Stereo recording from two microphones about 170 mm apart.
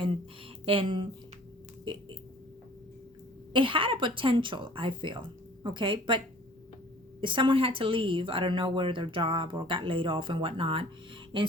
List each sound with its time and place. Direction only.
0.6 s speech: 30° right (ahead or behind)
3.5 s a woman's voice: 30° right (ahead or behind)